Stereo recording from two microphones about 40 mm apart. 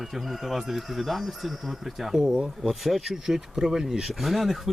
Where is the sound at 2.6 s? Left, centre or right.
Centre.